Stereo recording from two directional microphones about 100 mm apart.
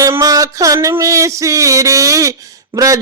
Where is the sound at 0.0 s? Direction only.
35° right (ahead or behind).